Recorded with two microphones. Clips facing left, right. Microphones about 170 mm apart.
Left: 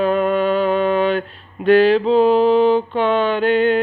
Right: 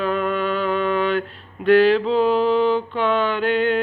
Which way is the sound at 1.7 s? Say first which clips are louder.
Left 2 dB; 20° left (ahead or behind).